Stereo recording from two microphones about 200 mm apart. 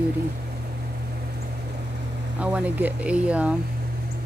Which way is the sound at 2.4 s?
5° right (ahead or behind).